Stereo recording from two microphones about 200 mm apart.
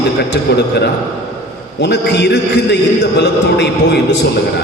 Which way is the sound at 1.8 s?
55° left (ahead or behind).